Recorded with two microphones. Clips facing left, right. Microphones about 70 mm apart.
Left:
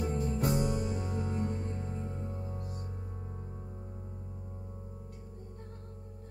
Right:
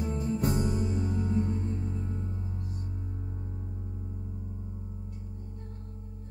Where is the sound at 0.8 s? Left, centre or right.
Left.